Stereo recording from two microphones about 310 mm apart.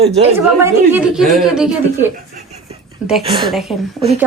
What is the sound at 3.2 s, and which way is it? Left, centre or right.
Speech, centre.